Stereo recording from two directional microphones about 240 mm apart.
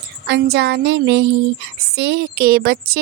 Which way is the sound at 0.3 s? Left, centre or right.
Right.